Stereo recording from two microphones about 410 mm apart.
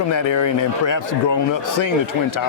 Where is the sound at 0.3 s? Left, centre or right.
Left.